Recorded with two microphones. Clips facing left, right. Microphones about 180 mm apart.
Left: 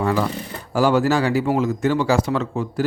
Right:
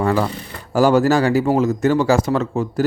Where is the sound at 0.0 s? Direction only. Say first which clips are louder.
Right 2 dB; 50° right (ahead or behind).